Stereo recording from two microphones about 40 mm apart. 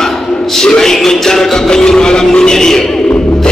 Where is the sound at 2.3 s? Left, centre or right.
Centre.